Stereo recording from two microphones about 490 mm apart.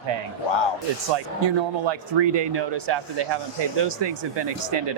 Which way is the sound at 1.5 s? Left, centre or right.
Right.